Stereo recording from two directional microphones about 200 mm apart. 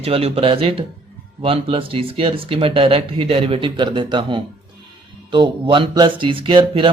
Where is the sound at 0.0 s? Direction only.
30° right (ahead or behind).